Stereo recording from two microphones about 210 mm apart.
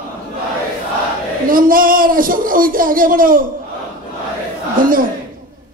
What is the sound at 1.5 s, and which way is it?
A man's voice, 40° right (ahead or behind).